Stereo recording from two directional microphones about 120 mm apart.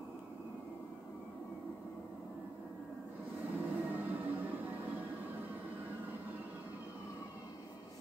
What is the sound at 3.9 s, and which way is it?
Music, 15° right (ahead or behind).